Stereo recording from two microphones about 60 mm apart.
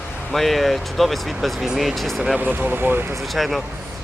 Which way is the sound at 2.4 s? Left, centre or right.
Right.